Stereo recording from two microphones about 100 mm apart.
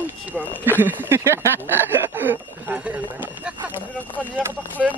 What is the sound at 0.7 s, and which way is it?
Speech, 20° right (ahead or behind).